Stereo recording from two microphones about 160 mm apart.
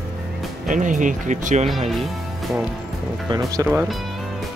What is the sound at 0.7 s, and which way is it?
Speech, 55° right (ahead or behind).